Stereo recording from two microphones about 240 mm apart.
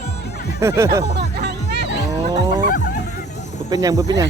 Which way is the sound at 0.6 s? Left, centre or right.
Centre.